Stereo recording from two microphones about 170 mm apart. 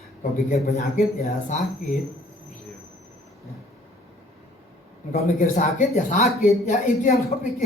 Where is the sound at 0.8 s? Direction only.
60° left (ahead or behind).